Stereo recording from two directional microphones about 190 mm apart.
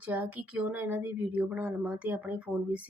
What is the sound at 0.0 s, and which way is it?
Speech, 10° right (ahead or behind).